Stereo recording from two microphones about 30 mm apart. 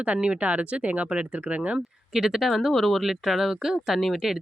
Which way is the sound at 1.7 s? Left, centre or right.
Centre.